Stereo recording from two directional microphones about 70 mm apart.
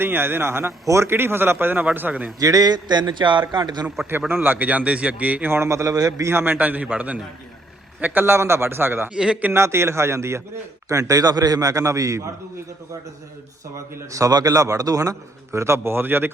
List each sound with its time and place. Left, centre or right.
0.0 s a man's voice: right
2.4 s a sound: right
4.3 s speech: right
5.5 s a man's voice: right
6.2 s a man's voice: right
9.1 s a man's voice: centre
9.5 s a man's voice: right
10.8 s a man's voice: right
13.7 s a man's voice: right
15.5 s a man's voice: right